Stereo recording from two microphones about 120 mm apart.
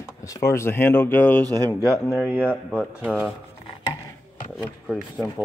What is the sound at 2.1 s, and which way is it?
Speech, 15° right (ahead or behind).